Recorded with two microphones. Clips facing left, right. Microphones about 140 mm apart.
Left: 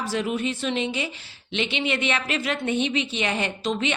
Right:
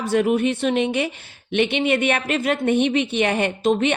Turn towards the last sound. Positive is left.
turn(degrees=-50)  # may be behind; listen again after turning